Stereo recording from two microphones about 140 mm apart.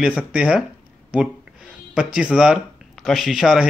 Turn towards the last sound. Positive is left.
turn(degrees=0)  # may be behind; listen again after turning